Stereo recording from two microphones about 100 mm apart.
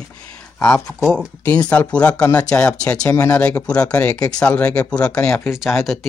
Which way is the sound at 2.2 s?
10° left (ahead or behind).